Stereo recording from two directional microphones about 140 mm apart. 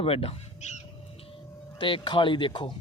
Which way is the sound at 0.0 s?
45° left (ahead or behind).